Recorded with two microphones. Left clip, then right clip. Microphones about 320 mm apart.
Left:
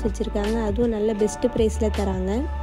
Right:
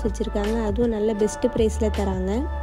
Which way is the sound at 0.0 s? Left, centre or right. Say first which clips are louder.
Even; centre.